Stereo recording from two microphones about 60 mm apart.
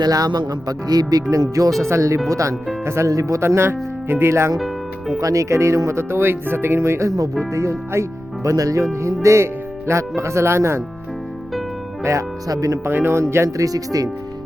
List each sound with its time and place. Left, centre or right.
0.1 s speech: right
1.9 s speech: right
3.4 s speech: right
4.5 s music: centre
5.2 s speech: right
8.4 s speech: right
9.0 s speech: right
12.0 s speech: right
12.8 s speech: right
13.7 s speech: right